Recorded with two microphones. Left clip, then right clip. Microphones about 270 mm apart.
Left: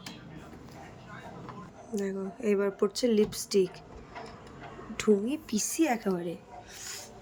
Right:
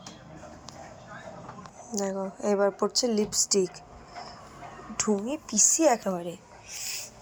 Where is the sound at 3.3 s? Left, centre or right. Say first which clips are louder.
Right 9 dB; centre.